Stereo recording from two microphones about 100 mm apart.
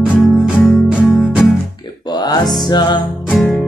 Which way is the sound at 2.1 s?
45° left (ahead or behind).